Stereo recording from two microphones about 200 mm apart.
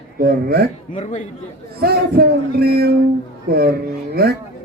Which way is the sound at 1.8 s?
50° right (ahead or behind).